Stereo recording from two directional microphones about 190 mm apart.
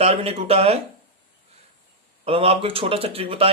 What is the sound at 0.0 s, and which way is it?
Speech, 30° right (ahead or behind).